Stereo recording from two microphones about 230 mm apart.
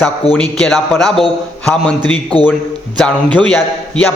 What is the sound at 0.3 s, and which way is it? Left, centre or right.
A man's voice, centre.